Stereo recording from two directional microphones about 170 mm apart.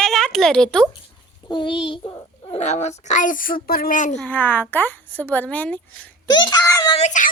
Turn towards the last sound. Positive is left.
turn(degrees=45)  # may be behind; listen again after turning